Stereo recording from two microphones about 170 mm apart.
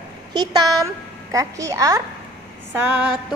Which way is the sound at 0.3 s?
25° right (ahead or behind).